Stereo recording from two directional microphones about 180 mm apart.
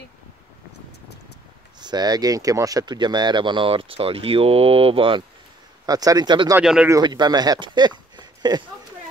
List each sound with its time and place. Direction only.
1.8 s speech: 25° right (ahead or behind)
6.6 s speech: 5° right (ahead or behind)
6.9 s speech: 25° right (ahead or behind)